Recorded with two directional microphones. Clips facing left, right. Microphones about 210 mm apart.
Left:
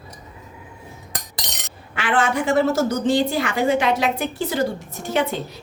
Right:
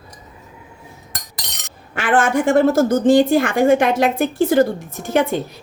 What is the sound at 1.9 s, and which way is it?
A woman's voice, 50° right (ahead or behind).